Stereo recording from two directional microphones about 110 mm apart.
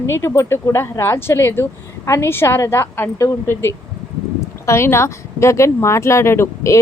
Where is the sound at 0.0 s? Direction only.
25° left (ahead or behind).